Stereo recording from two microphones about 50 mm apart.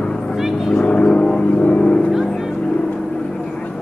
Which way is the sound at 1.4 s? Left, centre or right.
Left.